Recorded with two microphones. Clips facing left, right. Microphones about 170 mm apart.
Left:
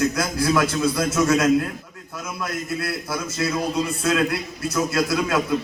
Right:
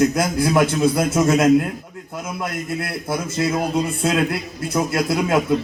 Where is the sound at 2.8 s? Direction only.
25° right (ahead or behind).